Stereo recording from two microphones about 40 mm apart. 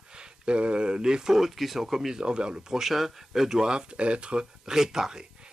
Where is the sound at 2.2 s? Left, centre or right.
Right.